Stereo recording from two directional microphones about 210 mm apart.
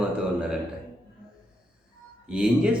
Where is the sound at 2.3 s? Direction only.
5° right (ahead or behind).